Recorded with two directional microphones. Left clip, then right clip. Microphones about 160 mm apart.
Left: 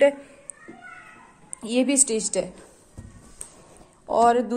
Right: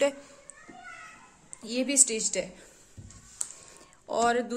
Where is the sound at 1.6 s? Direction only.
15° left (ahead or behind).